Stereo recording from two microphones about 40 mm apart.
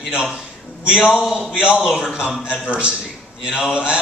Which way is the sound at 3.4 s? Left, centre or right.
Centre.